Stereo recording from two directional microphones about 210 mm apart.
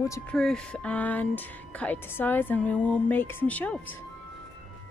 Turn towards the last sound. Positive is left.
turn(degrees=5)  # may be behind; listen again after turning